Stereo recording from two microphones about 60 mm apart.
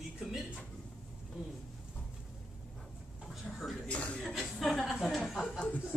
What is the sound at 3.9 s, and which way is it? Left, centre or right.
Speech, centre.